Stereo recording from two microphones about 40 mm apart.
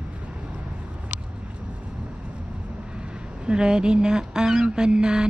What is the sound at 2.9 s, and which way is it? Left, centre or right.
Speech, right.